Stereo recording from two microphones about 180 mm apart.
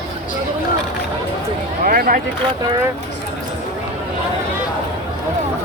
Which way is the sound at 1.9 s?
50° right (ahead or behind).